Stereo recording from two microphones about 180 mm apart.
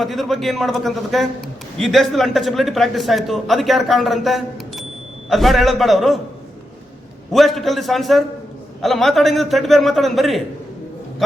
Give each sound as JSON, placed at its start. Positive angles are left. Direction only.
{"t": 0.0, "sound": "a man's voice", "side_deg": 0}
{"t": 7.3, "sound": "a man's voice", "side_deg": 0}